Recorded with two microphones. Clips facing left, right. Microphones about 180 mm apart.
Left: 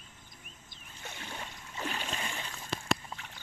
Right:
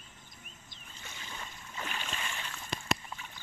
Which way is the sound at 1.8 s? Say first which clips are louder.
Left 3 dB; 35° left (ahead or behind).